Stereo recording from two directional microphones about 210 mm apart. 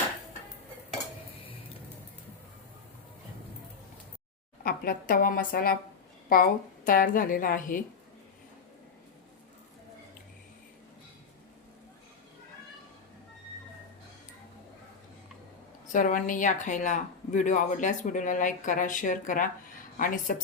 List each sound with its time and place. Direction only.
4.6 s speech: 45° left (ahead or behind)
15.9 s speech: 40° left (ahead or behind)